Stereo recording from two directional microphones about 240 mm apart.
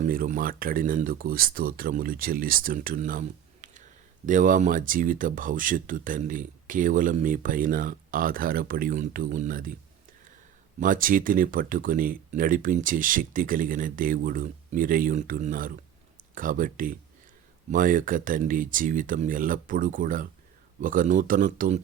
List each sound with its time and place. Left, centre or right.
0.0 s speech: right
10.8 s speech: right